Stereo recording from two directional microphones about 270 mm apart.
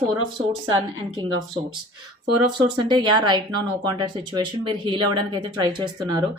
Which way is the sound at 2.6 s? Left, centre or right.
Centre.